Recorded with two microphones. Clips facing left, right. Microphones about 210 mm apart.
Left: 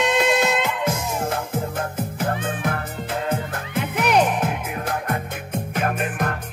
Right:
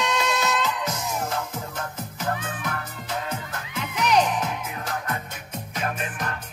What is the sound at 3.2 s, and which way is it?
Music, 55° left (ahead or behind).